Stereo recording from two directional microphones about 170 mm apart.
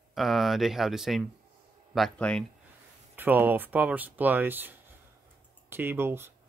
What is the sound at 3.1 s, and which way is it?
Speech, 10° right (ahead or behind).